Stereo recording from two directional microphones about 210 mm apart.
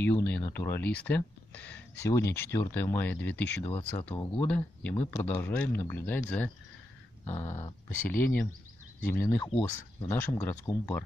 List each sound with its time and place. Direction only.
0.0 s speech: 10° left (ahead or behind)